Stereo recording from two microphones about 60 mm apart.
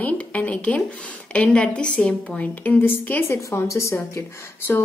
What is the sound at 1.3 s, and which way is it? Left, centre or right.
Speech, centre.